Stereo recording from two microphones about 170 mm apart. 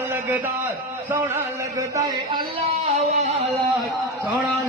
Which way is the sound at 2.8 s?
40° right (ahead or behind).